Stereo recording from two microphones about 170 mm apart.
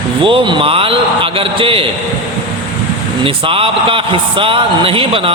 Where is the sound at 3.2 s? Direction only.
30° right (ahead or behind).